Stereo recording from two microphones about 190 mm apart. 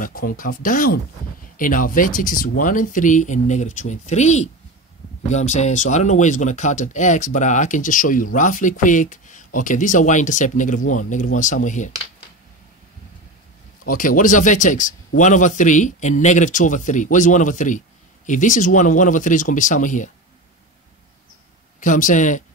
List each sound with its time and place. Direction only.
0.0 s speech: 50° left (ahead or behind)
13.8 s speech: 45° left (ahead or behind)
21.7 s speech: 45° left (ahead or behind)